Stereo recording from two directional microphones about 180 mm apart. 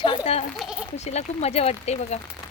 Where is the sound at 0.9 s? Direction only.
35° left (ahead or behind).